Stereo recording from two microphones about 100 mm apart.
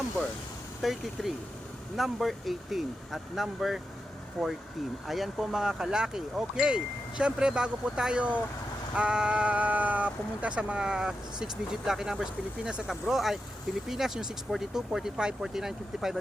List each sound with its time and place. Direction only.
0.8 s speech: centre (ahead or behind)